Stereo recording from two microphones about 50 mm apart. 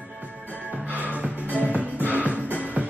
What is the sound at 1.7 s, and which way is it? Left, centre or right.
Music, right.